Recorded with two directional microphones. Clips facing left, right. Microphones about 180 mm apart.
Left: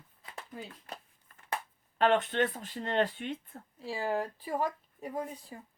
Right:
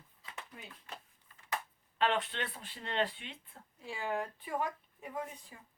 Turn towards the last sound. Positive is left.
turn(degrees=35)  # may be behind; listen again after turning